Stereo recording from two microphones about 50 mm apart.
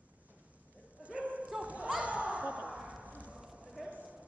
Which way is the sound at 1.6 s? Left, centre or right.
Right.